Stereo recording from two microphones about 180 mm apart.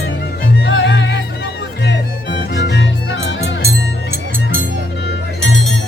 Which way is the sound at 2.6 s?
80° left.